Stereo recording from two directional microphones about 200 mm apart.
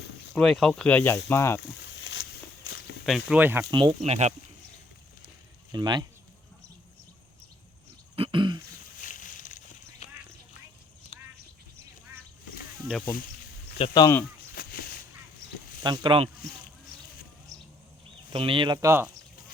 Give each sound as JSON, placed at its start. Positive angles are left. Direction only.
{"t": 0.3, "sound": "speech", "side_deg": 0}
{"t": 1.9, "sound": "walk", "side_deg": 70}
{"t": 3.1, "sound": "speech", "side_deg": 0}
{"t": 3.7, "sound": "speech", "side_deg": -25}
{"t": 5.7, "sound": "speech", "side_deg": -20}
{"t": 8.1, "sound": "throat clearing", "side_deg": -25}
{"t": 9.0, "sound": "vehicle", "side_deg": 40}
{"t": 11.1, "sound": "duck", "side_deg": 25}
{"t": 13.7, "sound": "speech", "side_deg": 25}
{"t": 14.5, "sound": "a sound", "side_deg": 50}
{"t": 15.8, "sound": "speech", "side_deg": -25}
{"t": 17.5, "sound": "a sound", "side_deg": -15}
{"t": 18.3, "sound": "speech", "side_deg": -25}